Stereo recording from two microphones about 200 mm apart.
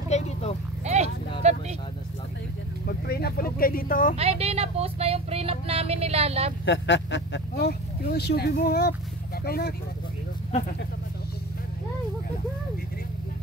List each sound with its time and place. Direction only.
0.1 s sheep: 35° left (ahead or behind)
0.8 s clip-clop: 35° right (ahead or behind)
1.4 s vehicle: 30° right (ahead or behind)
2.9 s vehicle: 50° left (ahead or behind)
4.2 s speech: 30° right (ahead or behind)
6.6 s speech: 65° left (ahead or behind)